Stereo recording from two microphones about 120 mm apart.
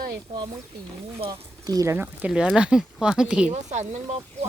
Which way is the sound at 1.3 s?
30° right (ahead or behind).